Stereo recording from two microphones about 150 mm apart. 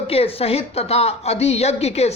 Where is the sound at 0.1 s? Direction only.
40° left (ahead or behind).